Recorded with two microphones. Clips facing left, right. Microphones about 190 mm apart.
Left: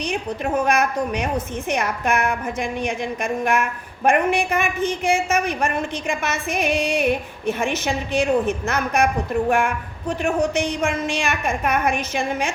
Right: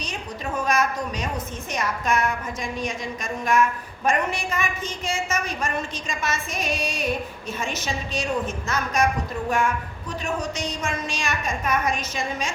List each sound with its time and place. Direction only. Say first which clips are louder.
0.0 s a woman's voice: left 8 dB; 60° left (ahead or behind)